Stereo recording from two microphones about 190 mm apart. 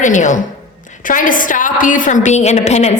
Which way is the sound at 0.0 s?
40° left (ahead or behind).